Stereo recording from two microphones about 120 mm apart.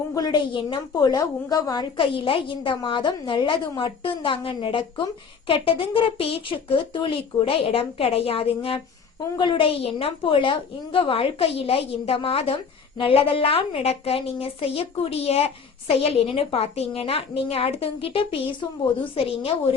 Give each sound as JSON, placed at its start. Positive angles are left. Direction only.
{"t": 0.1, "sound": "a woman's voice", "side_deg": 35}